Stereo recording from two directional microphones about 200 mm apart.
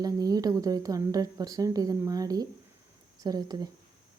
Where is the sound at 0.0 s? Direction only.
20° right (ahead or behind).